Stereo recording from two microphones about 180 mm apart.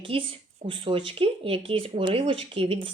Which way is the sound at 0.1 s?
30° right (ahead or behind).